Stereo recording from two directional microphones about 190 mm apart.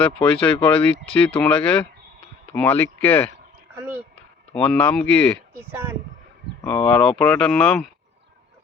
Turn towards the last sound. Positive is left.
turn(degrees=5)  # may be behind; listen again after turning